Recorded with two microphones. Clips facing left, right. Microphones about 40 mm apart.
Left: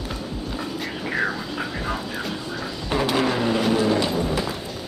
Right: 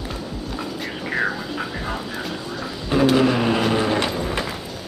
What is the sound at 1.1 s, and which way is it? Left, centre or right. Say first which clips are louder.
Vehicle: right 2 dB; centre.